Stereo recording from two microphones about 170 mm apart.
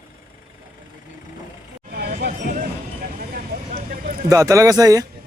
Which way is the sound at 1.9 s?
65° right (ahead or behind).